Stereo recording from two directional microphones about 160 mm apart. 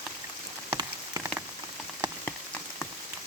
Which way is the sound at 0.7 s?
25° right (ahead or behind).